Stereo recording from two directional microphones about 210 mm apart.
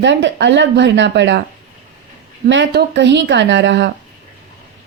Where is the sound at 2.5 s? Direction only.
55° right (ahead or behind).